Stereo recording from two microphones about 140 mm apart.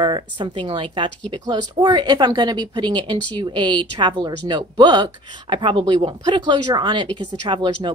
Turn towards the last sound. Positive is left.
turn(degrees=-35)  # may be behind; listen again after turning